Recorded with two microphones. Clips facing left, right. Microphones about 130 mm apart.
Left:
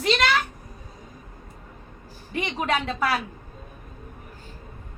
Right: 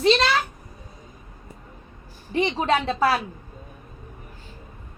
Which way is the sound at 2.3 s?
30° right (ahead or behind).